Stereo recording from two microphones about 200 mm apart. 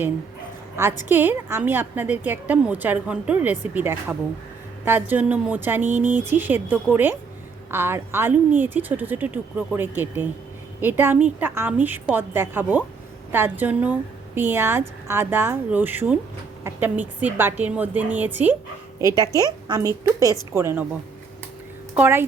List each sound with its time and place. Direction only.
1.0 s a woman's voice: 10° right (ahead or behind)
21.9 s a woman's voice: 10° right (ahead or behind)